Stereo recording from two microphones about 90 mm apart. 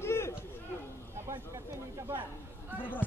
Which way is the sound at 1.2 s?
35° right (ahead or behind).